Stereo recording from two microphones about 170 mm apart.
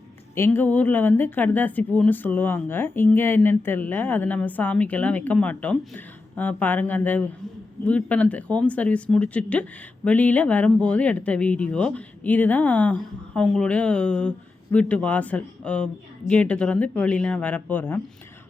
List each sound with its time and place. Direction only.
0.3 s speech: 15° left (ahead or behind)